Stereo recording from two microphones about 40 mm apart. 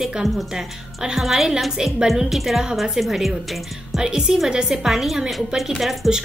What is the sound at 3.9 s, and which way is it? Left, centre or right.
A woman's voice, centre.